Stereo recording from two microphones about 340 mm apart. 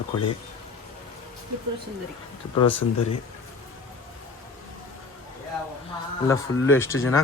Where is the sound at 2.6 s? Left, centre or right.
Centre.